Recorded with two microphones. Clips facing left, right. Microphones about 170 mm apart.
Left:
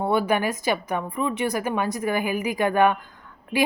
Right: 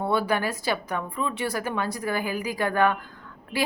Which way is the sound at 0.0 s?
15° left (ahead or behind).